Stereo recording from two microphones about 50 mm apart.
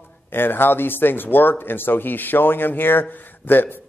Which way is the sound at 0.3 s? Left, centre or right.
Left.